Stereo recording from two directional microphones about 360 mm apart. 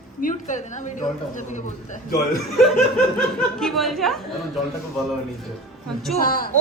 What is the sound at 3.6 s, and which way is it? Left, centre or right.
Speech, centre.